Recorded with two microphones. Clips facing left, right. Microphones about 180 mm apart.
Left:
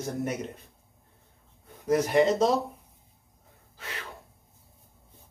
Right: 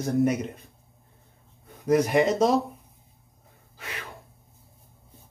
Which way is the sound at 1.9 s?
15° right (ahead or behind).